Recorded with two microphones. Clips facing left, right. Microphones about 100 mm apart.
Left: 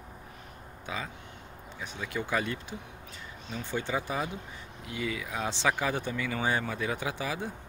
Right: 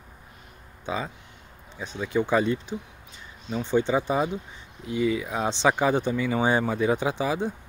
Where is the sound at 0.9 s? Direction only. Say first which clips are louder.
Right 7 dB; 25° right (ahead or behind).